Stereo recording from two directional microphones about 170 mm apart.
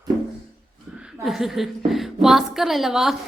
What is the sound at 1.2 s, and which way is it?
A woman's voice, centre (ahead or behind).